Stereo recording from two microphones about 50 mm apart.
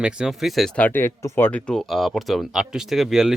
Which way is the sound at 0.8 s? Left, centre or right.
Left.